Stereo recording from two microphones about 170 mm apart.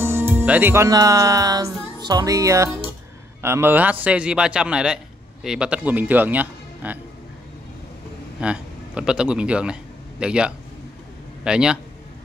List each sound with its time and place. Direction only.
0.0 s a man's voice: 15° right (ahead or behind)
8.4 s a man's voice: 5° right (ahead or behind)